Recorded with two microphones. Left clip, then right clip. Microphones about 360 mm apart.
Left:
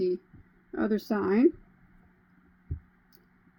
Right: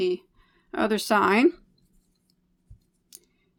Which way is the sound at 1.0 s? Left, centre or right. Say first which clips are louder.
Right 6 dB; right.